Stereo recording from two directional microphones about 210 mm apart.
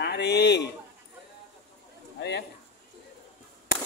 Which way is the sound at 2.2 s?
55° left (ahead or behind).